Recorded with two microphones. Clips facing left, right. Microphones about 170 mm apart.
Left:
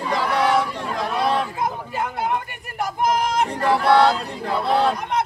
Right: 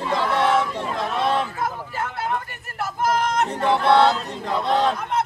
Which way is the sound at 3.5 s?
Centre (ahead or behind).